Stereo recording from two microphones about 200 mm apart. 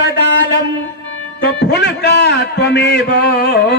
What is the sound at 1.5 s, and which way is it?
A man's voice, 60° left (ahead or behind).